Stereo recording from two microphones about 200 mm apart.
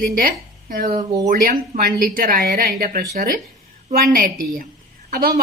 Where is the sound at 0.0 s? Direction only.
45° right (ahead or behind).